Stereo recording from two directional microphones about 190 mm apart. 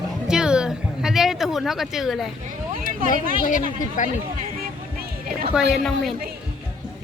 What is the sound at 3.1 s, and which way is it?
Speech, 45° left (ahead or behind).